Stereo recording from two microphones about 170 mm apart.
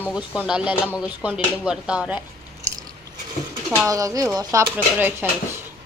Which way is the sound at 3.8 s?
20° right (ahead or behind).